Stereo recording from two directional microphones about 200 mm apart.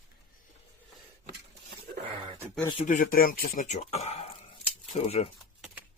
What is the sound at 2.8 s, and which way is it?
Speech, 40° left (ahead or behind).